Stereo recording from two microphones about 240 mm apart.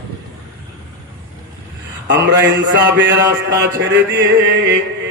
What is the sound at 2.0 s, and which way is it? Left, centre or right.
A man's voice, right.